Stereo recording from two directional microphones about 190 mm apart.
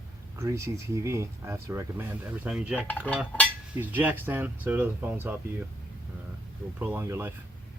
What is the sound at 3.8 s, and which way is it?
Speech, 10° right (ahead or behind).